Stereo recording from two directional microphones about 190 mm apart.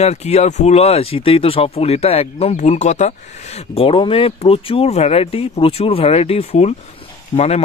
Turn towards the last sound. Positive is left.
turn(degrees=35)  # may be behind; listen again after turning